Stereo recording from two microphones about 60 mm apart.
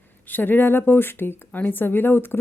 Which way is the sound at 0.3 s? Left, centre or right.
Left.